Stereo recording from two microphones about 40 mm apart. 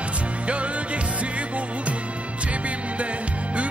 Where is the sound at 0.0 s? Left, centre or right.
Right.